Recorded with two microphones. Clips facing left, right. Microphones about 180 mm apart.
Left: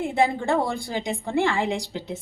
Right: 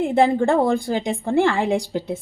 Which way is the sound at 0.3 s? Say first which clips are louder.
Right 6 dB; 50° right (ahead or behind).